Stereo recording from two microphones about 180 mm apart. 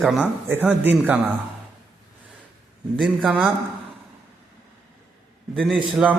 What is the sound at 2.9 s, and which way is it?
Speech, centre (ahead or behind).